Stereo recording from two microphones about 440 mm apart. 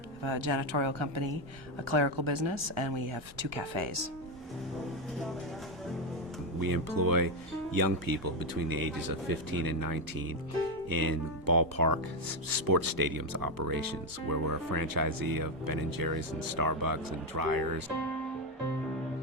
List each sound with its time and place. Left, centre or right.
0.2 s speech: right
6.6 s speech: right